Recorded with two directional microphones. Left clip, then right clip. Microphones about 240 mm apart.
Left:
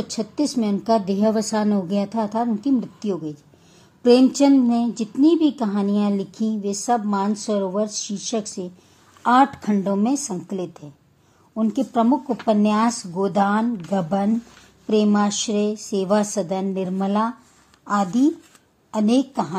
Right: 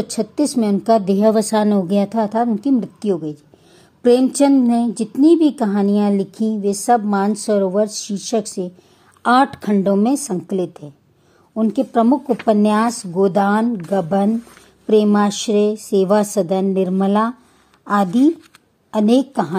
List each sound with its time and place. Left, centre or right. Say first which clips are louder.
0.0 s a woman's voice: right 5 dB; right